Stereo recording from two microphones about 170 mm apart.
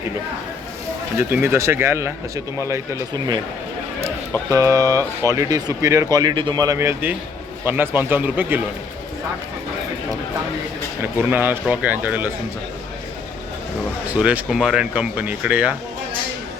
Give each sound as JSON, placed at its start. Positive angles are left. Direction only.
{"t": 1.3, "sound": "speech", "side_deg": -15}
{"t": 4.5, "sound": "speech", "side_deg": -20}
{"t": 11.2, "sound": "speech", "side_deg": -10}
{"t": 14.1, "sound": "speech", "side_deg": -10}